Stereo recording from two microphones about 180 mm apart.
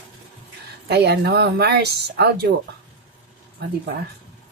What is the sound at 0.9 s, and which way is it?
Speech, 70° right (ahead or behind).